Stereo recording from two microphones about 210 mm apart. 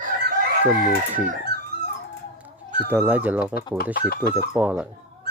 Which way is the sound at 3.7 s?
45° left (ahead or behind).